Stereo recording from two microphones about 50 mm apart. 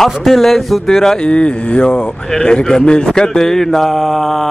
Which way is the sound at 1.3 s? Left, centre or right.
Left.